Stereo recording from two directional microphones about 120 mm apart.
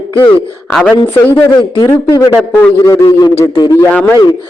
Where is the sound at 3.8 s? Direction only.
15° left (ahead or behind).